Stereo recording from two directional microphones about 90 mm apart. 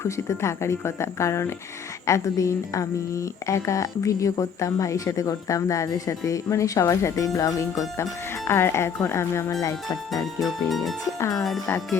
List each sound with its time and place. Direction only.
0.0 s a woman's voice: 30° left (ahead or behind)
10.4 s music: centre (ahead or behind)
11.2 s a woman's voice: 40° left (ahead or behind)